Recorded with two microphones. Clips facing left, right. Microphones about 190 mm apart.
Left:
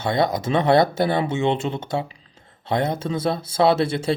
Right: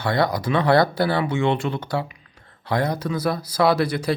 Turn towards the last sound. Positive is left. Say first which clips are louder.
# left 1 dB
turn(degrees=25)  # may be behind; listen again after turning